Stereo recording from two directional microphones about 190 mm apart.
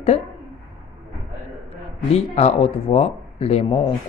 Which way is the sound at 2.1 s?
35° left (ahead or behind).